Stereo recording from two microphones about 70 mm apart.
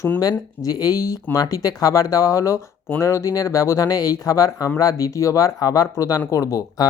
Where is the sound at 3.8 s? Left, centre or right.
Left.